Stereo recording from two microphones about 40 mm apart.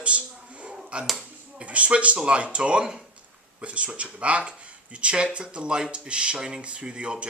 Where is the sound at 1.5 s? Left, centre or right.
Right.